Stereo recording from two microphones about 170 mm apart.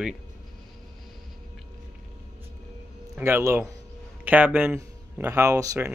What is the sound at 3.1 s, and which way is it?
Speech, 15° right (ahead or behind).